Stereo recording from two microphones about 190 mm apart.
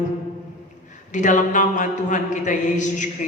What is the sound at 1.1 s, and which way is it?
A man's voice, 40° left (ahead or behind).